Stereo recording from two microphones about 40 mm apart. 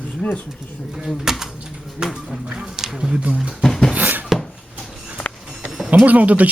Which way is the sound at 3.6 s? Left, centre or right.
Centre.